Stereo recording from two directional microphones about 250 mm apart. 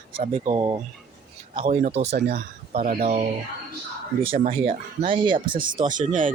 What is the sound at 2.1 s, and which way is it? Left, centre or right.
Speech, right.